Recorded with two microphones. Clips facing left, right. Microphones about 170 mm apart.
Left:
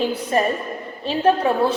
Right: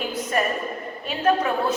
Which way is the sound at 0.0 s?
30° left (ahead or behind).